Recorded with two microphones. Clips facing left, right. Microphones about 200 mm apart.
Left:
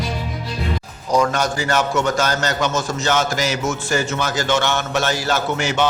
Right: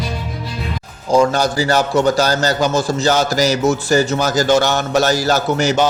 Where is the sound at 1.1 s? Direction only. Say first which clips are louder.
Right 4 dB; 30° right (ahead or behind).